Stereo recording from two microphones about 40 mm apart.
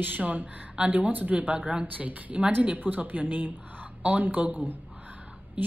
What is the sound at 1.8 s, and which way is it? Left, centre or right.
Speech, right.